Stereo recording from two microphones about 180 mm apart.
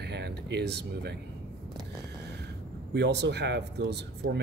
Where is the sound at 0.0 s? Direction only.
65° right (ahead or behind).